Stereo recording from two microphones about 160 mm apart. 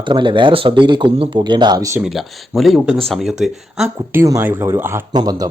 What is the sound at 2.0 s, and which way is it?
Speech, centre (ahead or behind).